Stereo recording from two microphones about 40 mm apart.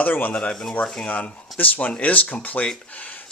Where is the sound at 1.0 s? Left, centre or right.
Left.